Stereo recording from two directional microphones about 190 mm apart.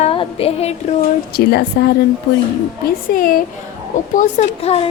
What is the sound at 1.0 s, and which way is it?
Speech, 55° left (ahead or behind).